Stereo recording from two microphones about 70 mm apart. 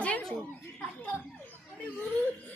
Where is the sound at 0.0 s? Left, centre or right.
Centre.